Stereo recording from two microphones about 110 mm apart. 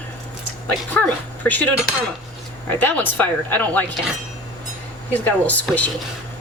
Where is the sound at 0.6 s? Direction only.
15° left (ahead or behind).